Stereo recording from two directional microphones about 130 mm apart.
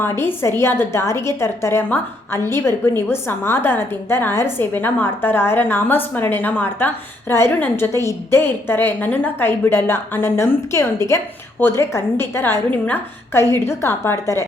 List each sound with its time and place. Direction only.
0.0 s a woman's voice: 15° left (ahead or behind)